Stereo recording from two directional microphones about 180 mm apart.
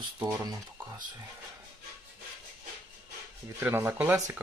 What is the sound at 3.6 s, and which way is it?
Speech, 10° right (ahead or behind).